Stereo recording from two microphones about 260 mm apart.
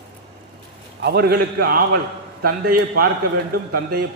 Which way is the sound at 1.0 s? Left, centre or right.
Right.